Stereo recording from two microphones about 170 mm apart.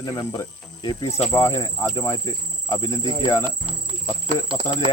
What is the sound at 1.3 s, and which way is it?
Cricket, 20° left (ahead or behind).